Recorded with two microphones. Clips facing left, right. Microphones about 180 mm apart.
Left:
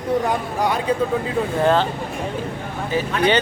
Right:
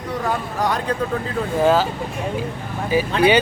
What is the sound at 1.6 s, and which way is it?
Speech, 5° right (ahead or behind).